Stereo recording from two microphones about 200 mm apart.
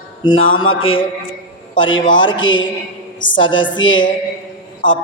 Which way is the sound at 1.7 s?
75° left (ahead or behind).